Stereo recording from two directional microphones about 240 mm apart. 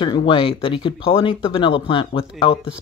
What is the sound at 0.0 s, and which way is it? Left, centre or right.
Speech, centre.